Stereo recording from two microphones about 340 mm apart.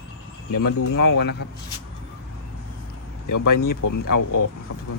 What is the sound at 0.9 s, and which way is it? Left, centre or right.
Speech, left.